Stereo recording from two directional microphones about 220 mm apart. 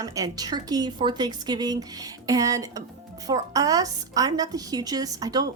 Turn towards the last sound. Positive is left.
turn(degrees=-15)  # may be behind; listen again after turning